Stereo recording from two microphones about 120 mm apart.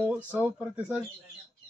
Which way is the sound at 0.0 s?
15° right (ahead or behind).